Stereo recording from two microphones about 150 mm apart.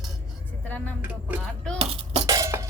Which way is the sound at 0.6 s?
10° left (ahead or behind).